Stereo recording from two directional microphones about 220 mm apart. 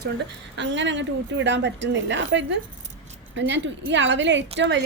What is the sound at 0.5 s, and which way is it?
A woman's voice, 55° right (ahead or behind).